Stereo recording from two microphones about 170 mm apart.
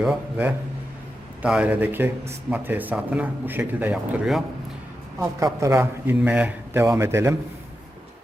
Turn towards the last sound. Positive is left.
turn(degrees=-15)  # may be behind; listen again after turning